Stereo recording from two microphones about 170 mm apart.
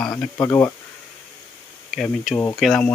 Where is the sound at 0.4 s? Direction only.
20° left (ahead or behind).